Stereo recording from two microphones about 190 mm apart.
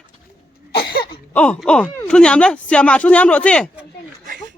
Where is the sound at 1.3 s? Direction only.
5° left (ahead or behind).